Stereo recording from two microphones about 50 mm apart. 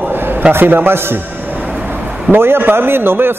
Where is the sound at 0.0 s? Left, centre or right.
Right.